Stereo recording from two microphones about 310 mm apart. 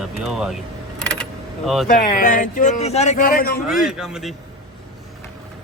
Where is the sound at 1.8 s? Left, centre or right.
Left.